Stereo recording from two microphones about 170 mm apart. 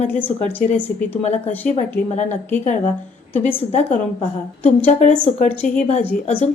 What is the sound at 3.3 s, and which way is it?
Speech, 10° left (ahead or behind).